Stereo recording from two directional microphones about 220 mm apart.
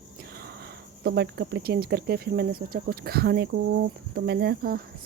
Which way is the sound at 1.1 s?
50° right (ahead or behind).